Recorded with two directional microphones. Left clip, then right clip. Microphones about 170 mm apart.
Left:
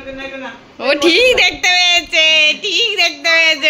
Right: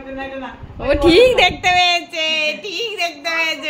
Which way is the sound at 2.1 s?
25° left (ahead or behind).